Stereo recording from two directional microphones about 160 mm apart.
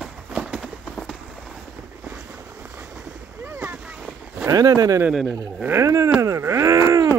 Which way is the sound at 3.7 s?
5° right (ahead or behind).